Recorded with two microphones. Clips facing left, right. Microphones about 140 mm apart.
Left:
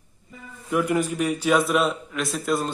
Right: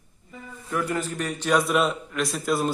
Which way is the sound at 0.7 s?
10° left (ahead or behind).